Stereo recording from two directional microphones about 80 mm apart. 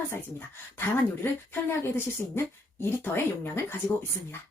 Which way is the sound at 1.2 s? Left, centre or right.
Left.